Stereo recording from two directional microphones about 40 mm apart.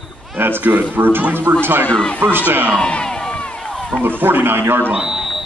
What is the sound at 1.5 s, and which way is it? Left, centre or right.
Speech, right.